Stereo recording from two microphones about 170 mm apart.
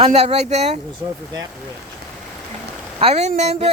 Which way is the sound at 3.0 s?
40° right (ahead or behind).